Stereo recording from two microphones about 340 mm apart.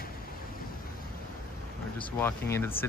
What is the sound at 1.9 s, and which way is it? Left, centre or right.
Speech, centre.